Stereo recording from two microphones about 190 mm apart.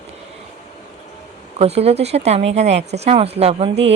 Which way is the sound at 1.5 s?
35° right (ahead or behind).